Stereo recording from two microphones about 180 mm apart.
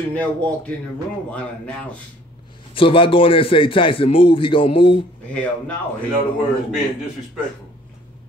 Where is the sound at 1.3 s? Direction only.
5° left (ahead or behind).